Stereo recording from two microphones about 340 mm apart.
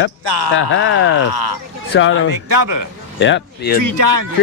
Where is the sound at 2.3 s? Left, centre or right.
Right.